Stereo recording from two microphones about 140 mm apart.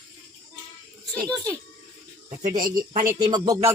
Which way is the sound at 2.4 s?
70° right (ahead or behind).